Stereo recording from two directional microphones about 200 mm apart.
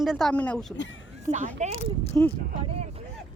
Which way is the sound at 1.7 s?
30° left (ahead or behind).